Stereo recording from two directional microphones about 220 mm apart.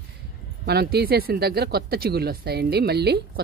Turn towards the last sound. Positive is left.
turn(degrees=-45)  # may be behind; listen again after turning